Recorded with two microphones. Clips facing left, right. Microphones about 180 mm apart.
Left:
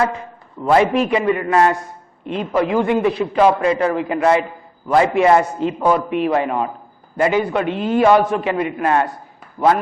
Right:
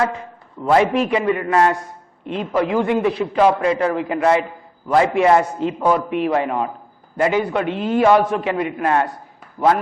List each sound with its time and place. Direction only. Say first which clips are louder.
0.0 s a man's voice: left 1 dB; 15° left (ahead or behind)